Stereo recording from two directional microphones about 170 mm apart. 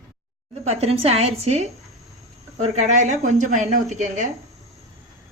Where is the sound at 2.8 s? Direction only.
45° right (ahead or behind).